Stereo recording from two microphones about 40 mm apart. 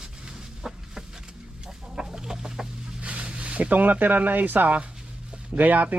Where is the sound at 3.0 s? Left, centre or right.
Right.